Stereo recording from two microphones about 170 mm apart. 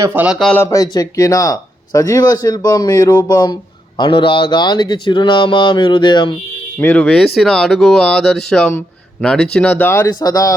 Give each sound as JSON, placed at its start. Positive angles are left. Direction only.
{"t": 0.0, "sound": "speech", "side_deg": -10}
{"t": 0.3, "sound": "speech", "side_deg": 0}
{"t": 0.6, "sound": "speech", "side_deg": 20}
{"t": 6.7, "sound": "speech", "side_deg": 10}